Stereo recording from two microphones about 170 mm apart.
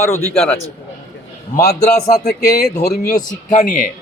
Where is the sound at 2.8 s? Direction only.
60° left (ahead or behind).